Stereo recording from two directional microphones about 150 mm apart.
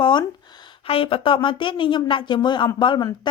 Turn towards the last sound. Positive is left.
turn(degrees=30)  # may be behind; listen again after turning